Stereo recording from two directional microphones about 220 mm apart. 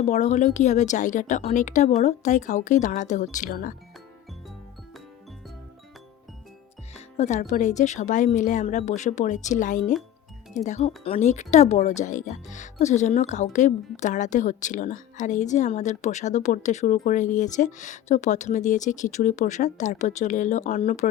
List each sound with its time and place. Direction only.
0.0 s speech: 30° left (ahead or behind)
7.2 s speech: 35° left (ahead or behind)